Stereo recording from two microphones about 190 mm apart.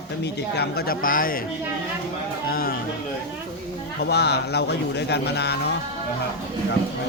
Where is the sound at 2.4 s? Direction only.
50° left (ahead or behind).